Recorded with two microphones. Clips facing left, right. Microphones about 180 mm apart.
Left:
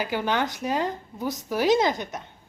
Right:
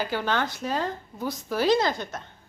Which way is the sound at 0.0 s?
15° left (ahead or behind).